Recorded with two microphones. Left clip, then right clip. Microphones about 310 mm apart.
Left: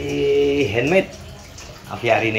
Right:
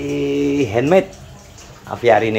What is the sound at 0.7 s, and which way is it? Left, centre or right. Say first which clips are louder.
Speech: right 3 dB; centre.